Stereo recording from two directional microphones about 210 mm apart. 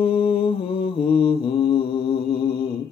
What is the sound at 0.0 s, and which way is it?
Mantra, 25° left (ahead or behind).